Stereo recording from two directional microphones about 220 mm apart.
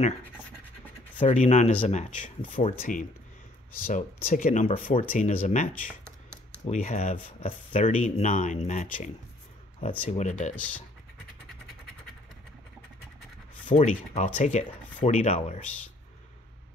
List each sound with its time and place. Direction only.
1.2 s speech: 30° left (ahead or behind)
10.0 s speech: 35° left (ahead or behind)
10.5 s speech: 5° left (ahead or behind)
13.7 s speech: 30° left (ahead or behind)